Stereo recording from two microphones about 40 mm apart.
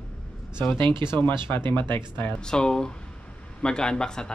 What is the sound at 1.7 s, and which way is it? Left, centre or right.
Speech, left.